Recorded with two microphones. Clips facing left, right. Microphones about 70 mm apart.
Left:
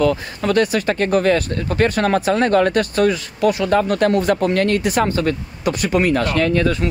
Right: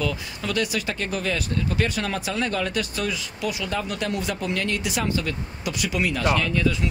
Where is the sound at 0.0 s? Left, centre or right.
Left.